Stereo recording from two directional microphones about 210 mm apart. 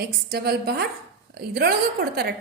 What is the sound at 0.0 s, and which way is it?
A woman's voice, 50° right (ahead or behind).